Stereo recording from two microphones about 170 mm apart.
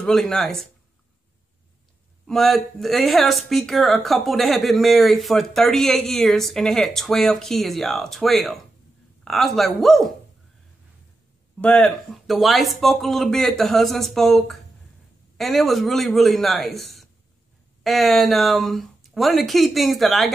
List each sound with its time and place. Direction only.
0.0 s speech: 5° left (ahead or behind)
2.2 s speech: centre (ahead or behind)
11.6 s speech: 5° left (ahead or behind)